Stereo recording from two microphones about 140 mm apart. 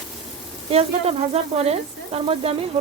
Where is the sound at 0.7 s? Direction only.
45° right (ahead or behind).